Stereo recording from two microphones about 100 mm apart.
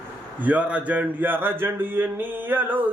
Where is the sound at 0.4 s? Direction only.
15° right (ahead or behind).